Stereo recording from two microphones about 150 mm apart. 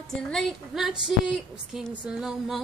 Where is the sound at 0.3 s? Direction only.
Centre (ahead or behind).